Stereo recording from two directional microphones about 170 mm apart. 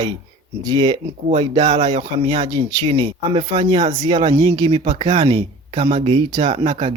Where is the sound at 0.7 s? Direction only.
25° right (ahead or behind).